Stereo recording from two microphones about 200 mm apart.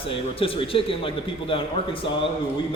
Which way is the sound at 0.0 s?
25° left (ahead or behind).